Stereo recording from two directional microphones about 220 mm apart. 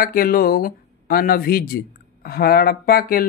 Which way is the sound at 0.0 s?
40° left (ahead or behind).